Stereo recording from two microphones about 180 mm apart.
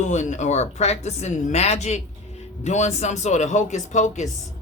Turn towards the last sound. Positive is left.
turn(degrees=40)  # may be behind; listen again after turning